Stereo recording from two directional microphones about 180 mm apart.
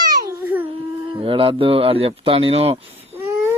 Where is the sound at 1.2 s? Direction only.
30° right (ahead or behind).